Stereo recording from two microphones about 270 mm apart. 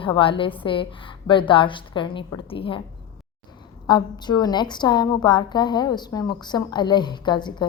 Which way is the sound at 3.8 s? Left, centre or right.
Centre.